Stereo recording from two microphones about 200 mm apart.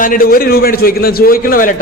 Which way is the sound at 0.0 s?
45° left (ahead or behind).